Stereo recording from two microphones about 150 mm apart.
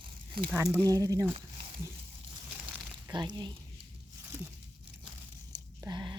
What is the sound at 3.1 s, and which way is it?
Speech, 30° right (ahead or behind).